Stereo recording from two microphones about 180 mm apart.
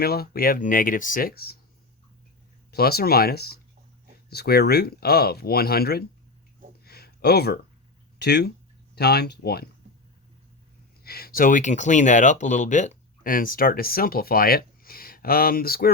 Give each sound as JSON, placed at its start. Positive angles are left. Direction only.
{"t": 0.0, "sound": "speech", "side_deg": 60}
{"t": 2.7, "sound": "speech", "side_deg": 60}
{"t": 6.8, "sound": "a sound", "side_deg": 60}
{"t": 8.2, "sound": "speech", "side_deg": 65}
{"t": 11.0, "sound": "speech", "side_deg": 60}